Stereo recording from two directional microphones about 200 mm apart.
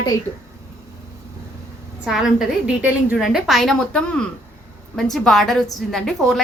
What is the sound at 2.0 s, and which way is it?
A woman's voice, centre (ahead or behind).